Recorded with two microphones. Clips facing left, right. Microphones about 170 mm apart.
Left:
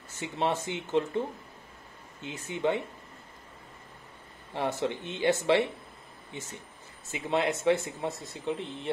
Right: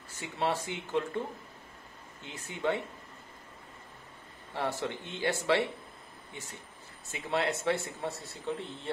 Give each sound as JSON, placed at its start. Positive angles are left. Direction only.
{"t": 0.2, "sound": "speech", "side_deg": 20}
{"t": 2.2, "sound": "speech", "side_deg": 20}
{"t": 4.6, "sound": "speech", "side_deg": 20}
{"t": 7.1, "sound": "speech", "side_deg": 20}